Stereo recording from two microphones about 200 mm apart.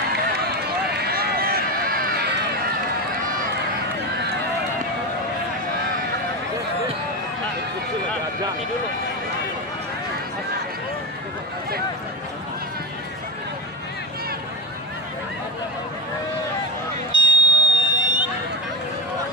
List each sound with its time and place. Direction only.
0.9 s run: 50° right (ahead or behind)
17.1 s vehicle: 25° left (ahead or behind)